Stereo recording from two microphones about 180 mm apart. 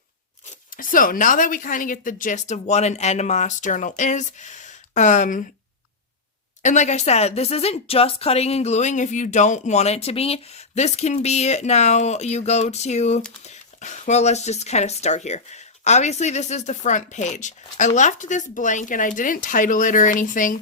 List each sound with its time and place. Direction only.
0.8 s speech: 50° left (ahead or behind)
6.6 s speech: 40° left (ahead or behind)